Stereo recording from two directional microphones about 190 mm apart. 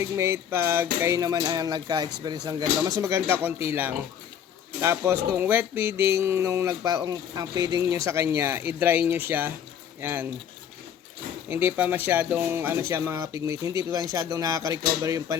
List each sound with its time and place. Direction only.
0.0 s speech: 15° right (ahead or behind)
11.4 s speech: 10° right (ahead or behind)